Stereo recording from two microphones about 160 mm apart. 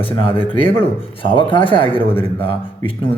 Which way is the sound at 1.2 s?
30° left (ahead or behind).